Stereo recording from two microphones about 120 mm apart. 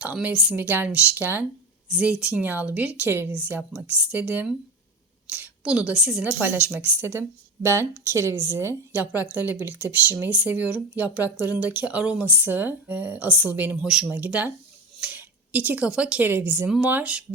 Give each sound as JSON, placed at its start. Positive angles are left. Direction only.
{"t": 0.0, "sound": "speech", "side_deg": -10}
{"t": 1.9, "sound": "a woman's voice", "side_deg": -5}
{"t": 16.6, "sound": "speech", "side_deg": -5}